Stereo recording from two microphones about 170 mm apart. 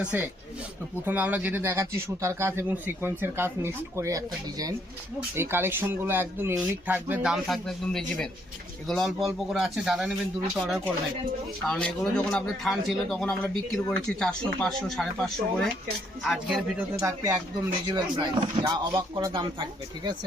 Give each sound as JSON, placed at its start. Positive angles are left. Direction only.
{"t": 0.0, "sound": "a man's voice", "side_deg": -10}
{"t": 17.0, "sound": "speech", "side_deg": -20}